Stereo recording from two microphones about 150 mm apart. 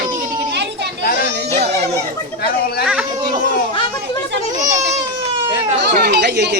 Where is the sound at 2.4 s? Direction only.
90° left.